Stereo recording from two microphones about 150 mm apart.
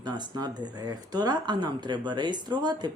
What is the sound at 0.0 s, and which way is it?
Speech, 30° right (ahead or behind).